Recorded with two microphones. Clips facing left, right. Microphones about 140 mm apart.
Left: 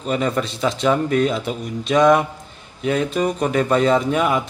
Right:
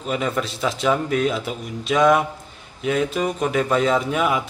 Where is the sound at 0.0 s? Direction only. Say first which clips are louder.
Left 3 dB; centre (ahead or behind).